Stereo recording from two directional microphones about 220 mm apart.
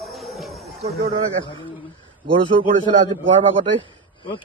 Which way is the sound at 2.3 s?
25° right (ahead or behind).